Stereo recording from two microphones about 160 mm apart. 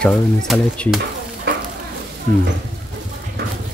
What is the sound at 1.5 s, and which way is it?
Stir, 90° right.